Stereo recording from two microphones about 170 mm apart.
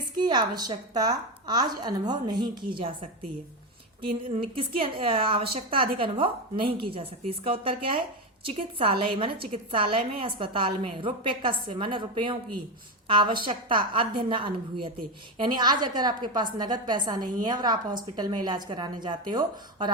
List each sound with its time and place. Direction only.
0.2 s a woman's voice: 25° right (ahead or behind)